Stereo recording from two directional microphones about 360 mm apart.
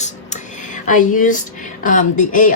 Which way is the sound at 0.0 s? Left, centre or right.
Centre.